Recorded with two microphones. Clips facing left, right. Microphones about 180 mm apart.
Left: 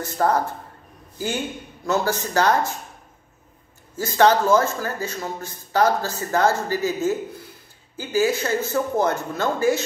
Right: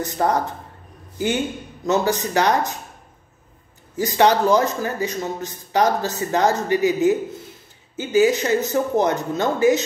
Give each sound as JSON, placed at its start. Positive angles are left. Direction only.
{"t": 0.0, "sound": "a man's voice", "side_deg": -15}
{"t": 3.9, "sound": "speech", "side_deg": -15}